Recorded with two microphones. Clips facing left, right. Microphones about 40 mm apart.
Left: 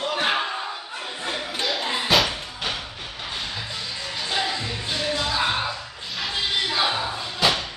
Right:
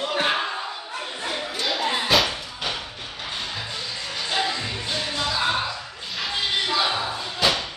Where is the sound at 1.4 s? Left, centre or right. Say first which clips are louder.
Right 1 dB; centre.